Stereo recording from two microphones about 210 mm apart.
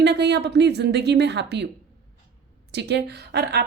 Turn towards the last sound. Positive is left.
turn(degrees=-50)  # may be behind; listen again after turning